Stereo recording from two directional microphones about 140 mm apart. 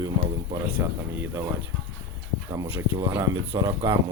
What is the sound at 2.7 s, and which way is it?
Speech, 15° right (ahead or behind).